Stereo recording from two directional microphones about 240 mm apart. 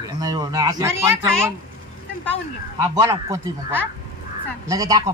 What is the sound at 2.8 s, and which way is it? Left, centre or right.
Speech, centre.